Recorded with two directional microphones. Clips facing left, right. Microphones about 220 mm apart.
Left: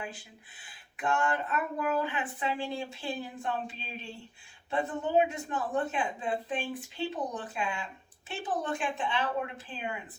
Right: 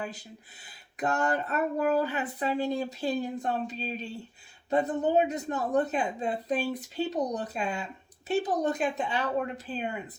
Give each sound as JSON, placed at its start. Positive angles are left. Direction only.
{"t": 0.0, "sound": "speech", "side_deg": -40}